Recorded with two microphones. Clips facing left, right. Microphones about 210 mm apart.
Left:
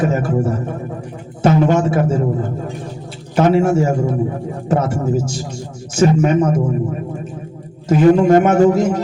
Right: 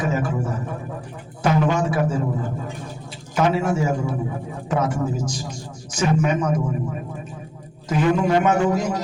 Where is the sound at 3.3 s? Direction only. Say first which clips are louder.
Left 6 dB; 30° left (ahead or behind).